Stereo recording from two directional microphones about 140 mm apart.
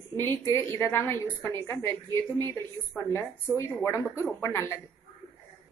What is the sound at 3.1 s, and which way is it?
A woman's voice, 20° left (ahead or behind).